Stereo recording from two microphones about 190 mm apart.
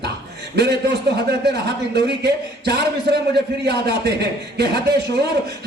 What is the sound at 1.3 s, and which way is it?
A man's voice, 60° right (ahead or behind).